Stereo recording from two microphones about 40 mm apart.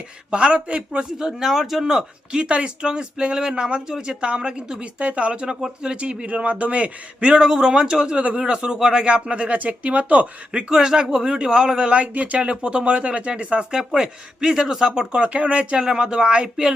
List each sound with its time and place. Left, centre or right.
0.3 s a man's voice: right
2.3 s speech: right
7.4 s a man's voice: centre
8.1 s a man's voice: right
12.1 s speech: right
12.5 s speech: right